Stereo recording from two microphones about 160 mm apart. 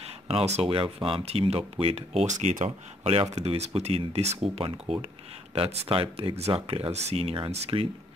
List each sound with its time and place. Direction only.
0.3 s speech: 35° right (ahead or behind)